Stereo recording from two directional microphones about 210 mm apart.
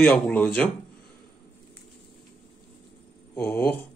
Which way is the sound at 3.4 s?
10° left (ahead or behind).